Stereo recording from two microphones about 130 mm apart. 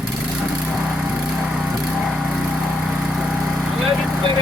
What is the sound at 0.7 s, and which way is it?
Lawn mower, 5° right (ahead or behind).